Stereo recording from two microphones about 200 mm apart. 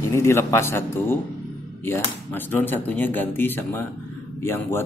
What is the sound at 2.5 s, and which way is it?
Speech, 10° left (ahead or behind).